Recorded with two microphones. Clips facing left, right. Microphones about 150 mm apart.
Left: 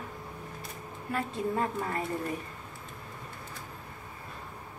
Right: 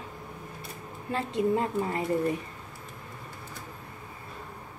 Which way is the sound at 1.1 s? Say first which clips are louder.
Right 4 dB; 20° right (ahead or behind).